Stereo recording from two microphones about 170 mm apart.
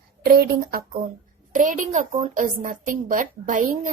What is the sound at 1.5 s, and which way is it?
A woman's voice, 50° right (ahead or behind).